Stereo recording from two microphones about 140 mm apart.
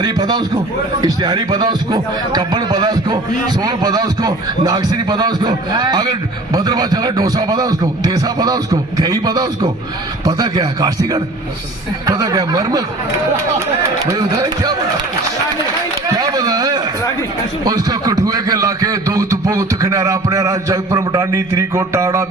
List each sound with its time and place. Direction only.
0.0 s a man's voice: 30° right (ahead or behind)
14.0 s a man's voice: 25° right (ahead or behind)
16.1 s a sound: 25° right (ahead or behind)
17.7 s a man's voice: 25° right (ahead or behind)